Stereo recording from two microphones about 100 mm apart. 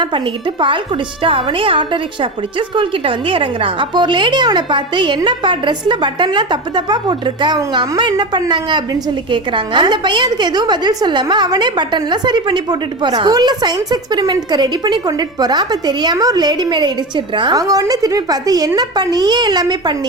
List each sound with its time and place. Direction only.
0.0 s a woman's voice: 55° right (ahead or behind)
17.6 s a woman's voice: 35° right (ahead or behind)